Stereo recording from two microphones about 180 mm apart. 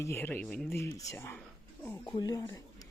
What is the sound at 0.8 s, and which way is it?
Speech, 15° left (ahead or behind).